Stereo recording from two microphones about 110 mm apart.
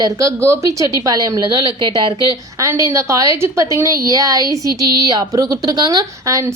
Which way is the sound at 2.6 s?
25° right (ahead or behind).